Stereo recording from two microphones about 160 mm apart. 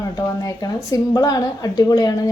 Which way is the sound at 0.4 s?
20° left (ahead or behind).